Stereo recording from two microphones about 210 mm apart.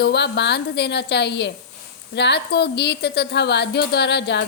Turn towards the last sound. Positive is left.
turn(degrees=55)  # may be behind; listen again after turning